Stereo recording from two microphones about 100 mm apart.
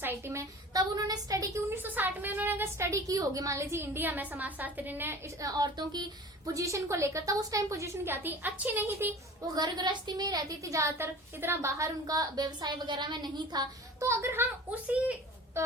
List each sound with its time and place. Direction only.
0.0 s a woman's voice: 25° right (ahead or behind)
0.7 s a woman's voice: 40° right (ahead or behind)
1.7 s a woman's voice: 20° right (ahead or behind)
5.4 s a woman's voice: 40° right (ahead or behind); by 9.1 s 20° right (ahead or behind)
9.6 s a woman's voice: 45° right (ahead or behind); by 11.9 s 25° right (ahead or behind)
12.0 s a woman's voice: 40° right (ahead or behind)
14.0 s a woman's voice: 30° right (ahead or behind)
14.7 s a woman's voice: 15° right (ahead or behind)
15.6 s a woman's voice: 25° right (ahead or behind)